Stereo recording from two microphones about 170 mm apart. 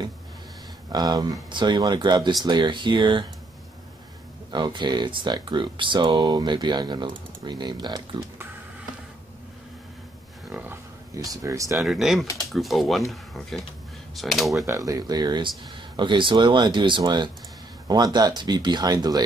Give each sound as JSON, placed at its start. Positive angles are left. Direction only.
{"t": 0.9, "sound": "speech", "side_deg": -25}
{"t": 4.5, "sound": "speech", "side_deg": -25}
{"t": 10.5, "sound": "a sound", "side_deg": -10}
{"t": 11.8, "sound": "speech", "side_deg": 0}
{"t": 14.7, "sound": "speech", "side_deg": -20}